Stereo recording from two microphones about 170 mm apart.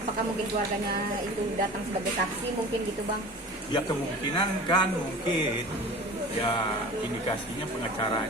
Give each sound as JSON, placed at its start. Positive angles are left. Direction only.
{"t": 4.4, "sound": "a man's voice", "side_deg": 25}